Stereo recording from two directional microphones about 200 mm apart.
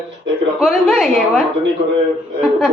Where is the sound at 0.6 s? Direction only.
Centre (ahead or behind).